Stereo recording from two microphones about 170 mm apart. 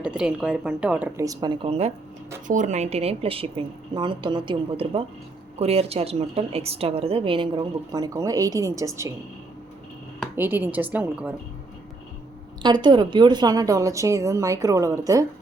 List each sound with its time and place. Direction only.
0.0 s speech: 5° right (ahead or behind); by 1.9 s 35° right (ahead or behind)
2.5 s a woman's voice: 45° right (ahead or behind); by 9.1 s 15° right (ahead or behind)
10.3 s speech: 10° right (ahead or behind)
12.6 s a woman's voice: 25° right (ahead or behind)